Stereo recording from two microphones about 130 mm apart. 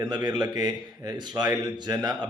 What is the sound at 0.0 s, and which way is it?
A man's voice, 35° right (ahead or behind).